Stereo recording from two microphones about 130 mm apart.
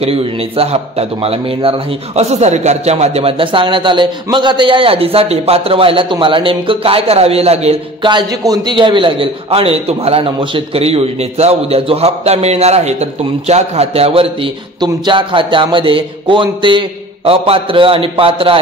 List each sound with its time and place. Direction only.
0.0 s a man's voice: 50° right (ahead or behind)
8.1 s a man's voice: 30° right (ahead or behind)